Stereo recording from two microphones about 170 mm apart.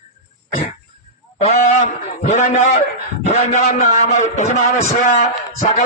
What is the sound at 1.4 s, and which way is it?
A man's voice, 45° left (ahead or behind).